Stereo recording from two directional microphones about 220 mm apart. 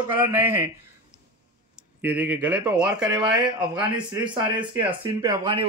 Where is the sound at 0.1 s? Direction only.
10° right (ahead or behind).